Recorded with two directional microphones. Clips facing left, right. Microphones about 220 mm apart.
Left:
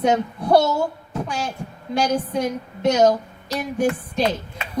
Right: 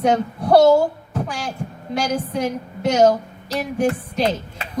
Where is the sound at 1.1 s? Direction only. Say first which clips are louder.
Left 1 dB; 30° left (ahead or behind).